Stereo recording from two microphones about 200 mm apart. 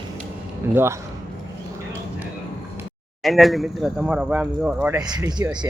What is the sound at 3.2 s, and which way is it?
Speech, centre (ahead or behind).